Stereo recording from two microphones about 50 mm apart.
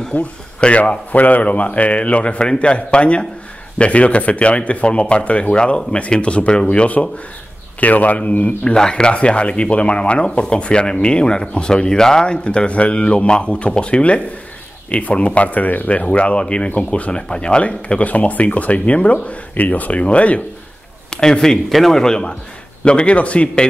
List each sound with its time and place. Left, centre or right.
0.1 s a man's voice: left
8.7 s speech: centre
21.1 s a man's voice: centre